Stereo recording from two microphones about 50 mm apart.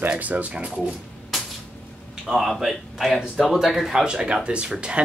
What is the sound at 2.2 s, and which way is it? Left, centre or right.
Speech, centre.